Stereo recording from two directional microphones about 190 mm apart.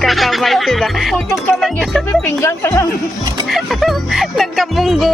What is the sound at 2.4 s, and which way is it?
Speech, 15° left (ahead or behind).